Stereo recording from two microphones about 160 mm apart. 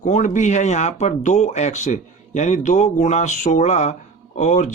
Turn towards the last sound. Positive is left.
turn(degrees=45)  # may be behind; listen again after turning